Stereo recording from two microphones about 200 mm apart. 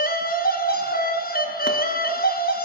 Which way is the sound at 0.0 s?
45° left (ahead or behind).